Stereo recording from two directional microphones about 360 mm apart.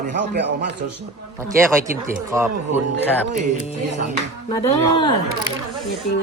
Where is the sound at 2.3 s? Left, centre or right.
Centre.